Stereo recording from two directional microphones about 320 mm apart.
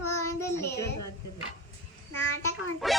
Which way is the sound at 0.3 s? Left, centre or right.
Centre.